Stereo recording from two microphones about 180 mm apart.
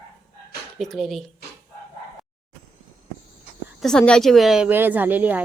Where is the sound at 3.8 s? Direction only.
5° left (ahead or behind).